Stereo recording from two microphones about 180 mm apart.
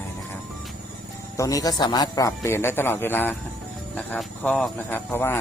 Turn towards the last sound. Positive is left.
turn(degrees=10)  # may be behind; listen again after turning